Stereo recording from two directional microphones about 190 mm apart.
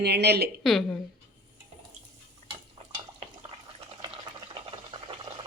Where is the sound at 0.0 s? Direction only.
60° right (ahead or behind).